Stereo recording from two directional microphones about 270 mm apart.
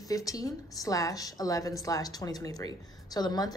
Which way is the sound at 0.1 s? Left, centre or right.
Centre.